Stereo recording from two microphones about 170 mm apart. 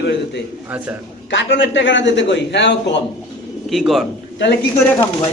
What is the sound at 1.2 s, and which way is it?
A man's voice, 90° left.